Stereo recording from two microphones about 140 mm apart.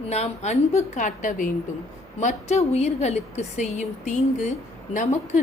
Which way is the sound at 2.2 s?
50° left (ahead or behind).